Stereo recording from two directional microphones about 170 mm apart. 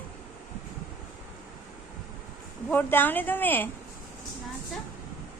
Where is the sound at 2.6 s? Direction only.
10° left (ahead or behind).